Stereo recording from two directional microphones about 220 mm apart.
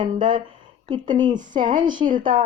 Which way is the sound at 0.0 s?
20° right (ahead or behind).